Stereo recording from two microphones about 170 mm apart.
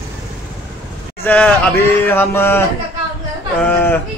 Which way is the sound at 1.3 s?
10° left (ahead or behind).